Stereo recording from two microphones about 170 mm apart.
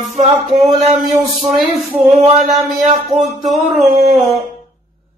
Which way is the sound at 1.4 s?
45° right (ahead or behind).